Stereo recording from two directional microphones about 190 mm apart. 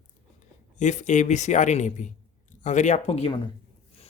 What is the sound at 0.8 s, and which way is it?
Speech, 40° left (ahead or behind).